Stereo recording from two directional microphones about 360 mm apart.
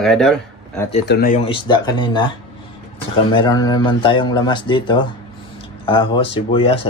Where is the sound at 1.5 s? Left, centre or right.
Centre.